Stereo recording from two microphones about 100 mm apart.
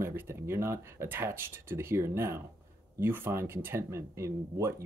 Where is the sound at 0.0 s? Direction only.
25° right (ahead or behind).